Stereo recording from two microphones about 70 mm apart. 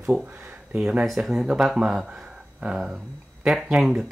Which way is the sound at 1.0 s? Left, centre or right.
Centre.